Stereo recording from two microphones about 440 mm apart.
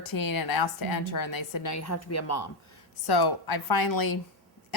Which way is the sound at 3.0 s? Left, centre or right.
Left.